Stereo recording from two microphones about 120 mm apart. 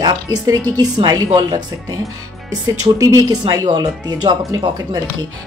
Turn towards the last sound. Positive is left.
turn(degrees=-30)  # may be behind; listen again after turning